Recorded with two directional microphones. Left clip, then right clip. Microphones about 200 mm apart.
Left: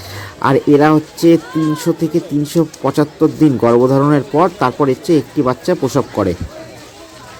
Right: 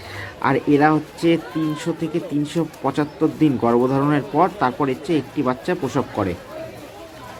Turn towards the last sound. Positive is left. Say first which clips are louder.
# left 7 dB
turn(degrees=35)  # may be behind; listen again after turning